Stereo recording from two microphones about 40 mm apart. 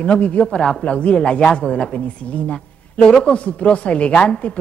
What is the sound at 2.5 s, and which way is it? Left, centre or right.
A man's voice, centre.